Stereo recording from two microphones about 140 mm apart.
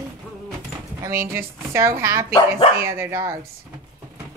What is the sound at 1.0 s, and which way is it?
Speech, 20° right (ahead or behind).